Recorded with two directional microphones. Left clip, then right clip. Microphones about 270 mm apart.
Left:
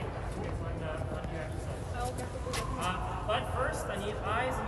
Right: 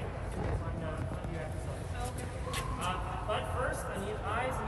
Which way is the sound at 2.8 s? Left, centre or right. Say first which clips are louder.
Left 2 dB; centre.